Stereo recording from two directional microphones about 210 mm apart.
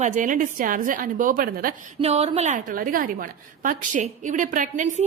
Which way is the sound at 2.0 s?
30° right (ahead or behind).